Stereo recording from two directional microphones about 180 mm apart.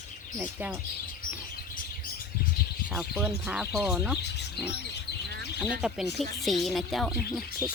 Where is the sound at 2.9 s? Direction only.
5° right (ahead or behind).